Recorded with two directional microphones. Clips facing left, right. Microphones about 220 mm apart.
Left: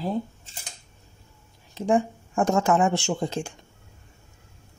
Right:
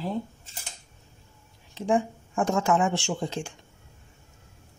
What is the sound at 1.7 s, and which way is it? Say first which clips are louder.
Speech: left 2 dB; 40° left (ahead or behind).